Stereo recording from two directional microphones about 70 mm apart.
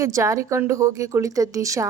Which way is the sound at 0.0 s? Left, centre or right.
Right.